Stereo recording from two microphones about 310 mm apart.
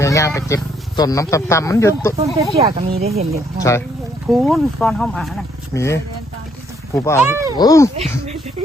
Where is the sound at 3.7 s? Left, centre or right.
Centre.